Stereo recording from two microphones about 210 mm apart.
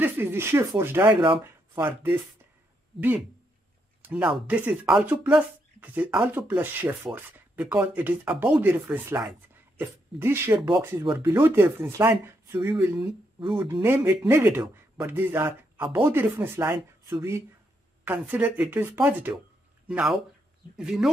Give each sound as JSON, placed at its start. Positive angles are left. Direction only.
{"t": 0.0, "sound": "speech", "side_deg": -10}
{"t": 4.0, "sound": "speech", "side_deg": -5}
{"t": 13.0, "sound": "speech", "side_deg": -25}
{"t": 13.7, "sound": "speech", "side_deg": -10}